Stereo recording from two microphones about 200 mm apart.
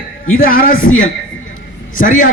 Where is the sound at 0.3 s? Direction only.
45° left (ahead or behind).